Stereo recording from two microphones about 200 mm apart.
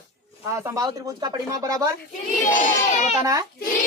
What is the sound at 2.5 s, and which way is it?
Speech, 40° left (ahead or behind).